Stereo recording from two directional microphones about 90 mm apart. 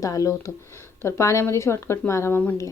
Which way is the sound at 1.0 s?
30° left (ahead or behind).